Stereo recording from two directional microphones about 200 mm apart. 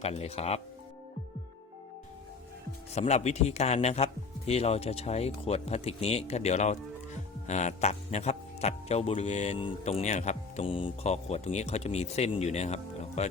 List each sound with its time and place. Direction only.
0.0 s speech: 30° left (ahead or behind)
2.9 s speech: 35° left (ahead or behind)